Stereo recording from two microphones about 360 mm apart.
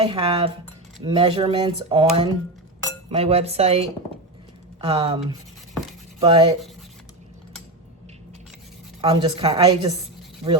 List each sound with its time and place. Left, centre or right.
0.0 s speech: centre
9.0 s speech: centre